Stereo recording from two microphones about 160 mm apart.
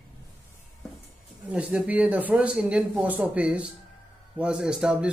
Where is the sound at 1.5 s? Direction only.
10° right (ahead or behind).